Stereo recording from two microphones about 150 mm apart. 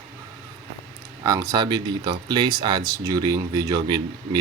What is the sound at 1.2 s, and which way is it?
Speech, 25° right (ahead or behind).